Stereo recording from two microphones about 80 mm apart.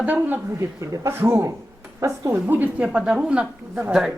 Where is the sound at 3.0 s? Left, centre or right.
Centre.